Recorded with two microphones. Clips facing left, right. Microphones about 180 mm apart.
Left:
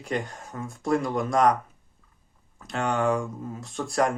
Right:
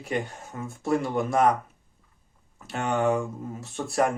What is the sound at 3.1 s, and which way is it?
Speech, 5° right (ahead or behind).